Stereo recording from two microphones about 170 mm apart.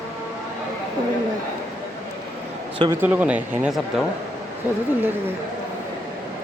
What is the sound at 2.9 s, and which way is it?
Speech, 10° right (ahead or behind).